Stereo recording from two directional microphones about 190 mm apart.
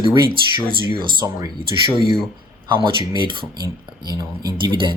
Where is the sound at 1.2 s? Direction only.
20° right (ahead or behind).